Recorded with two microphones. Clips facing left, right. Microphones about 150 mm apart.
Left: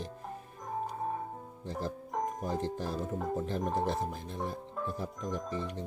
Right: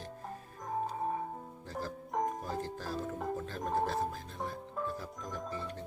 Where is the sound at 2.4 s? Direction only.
20° left (ahead or behind).